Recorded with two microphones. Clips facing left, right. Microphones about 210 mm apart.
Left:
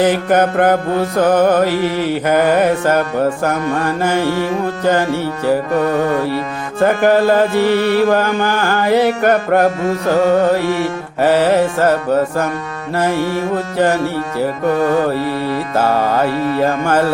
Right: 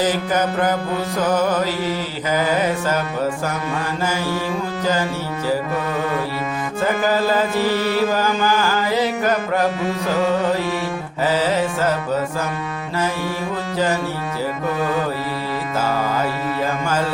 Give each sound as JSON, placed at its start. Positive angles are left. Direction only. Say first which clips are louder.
{"t": 0.0, "sound": "music", "louder": "left 6 dB", "side_deg": 60}
{"t": 6.8, "sound": "music", "louder": "left 7 dB", "side_deg": 60}
{"t": 11.2, "sound": "music", "louder": "left 7 dB", "side_deg": 60}
{"t": 13.7, "sound": "music", "louder": "left 5 dB", "side_deg": 60}
{"t": 15.7, "sound": "music", "louder": "left 6 dB", "side_deg": 60}